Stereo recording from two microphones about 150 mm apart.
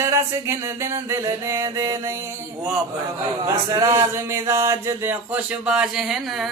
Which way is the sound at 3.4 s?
20° right (ahead or behind).